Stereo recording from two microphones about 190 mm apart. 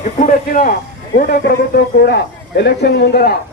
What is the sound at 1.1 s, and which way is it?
A man's voice, 55° left (ahead or behind).